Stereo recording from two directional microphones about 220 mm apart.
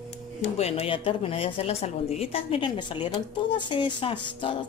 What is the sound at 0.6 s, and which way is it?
A woman's voice, 30° left (ahead or behind).